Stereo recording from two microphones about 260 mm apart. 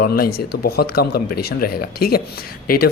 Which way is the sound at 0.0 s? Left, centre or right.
Left.